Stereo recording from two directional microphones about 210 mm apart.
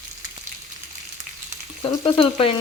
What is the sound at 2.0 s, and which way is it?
Frying, 25° left (ahead or behind).